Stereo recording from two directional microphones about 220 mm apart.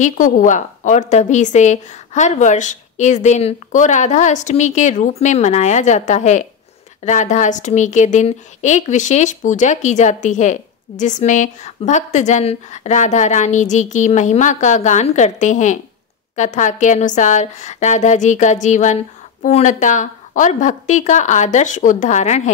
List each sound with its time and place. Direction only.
0.0 s a woman's voice: 35° left (ahead or behind)